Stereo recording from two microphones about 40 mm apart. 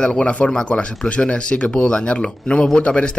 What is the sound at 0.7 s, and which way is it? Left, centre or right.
Speech, left.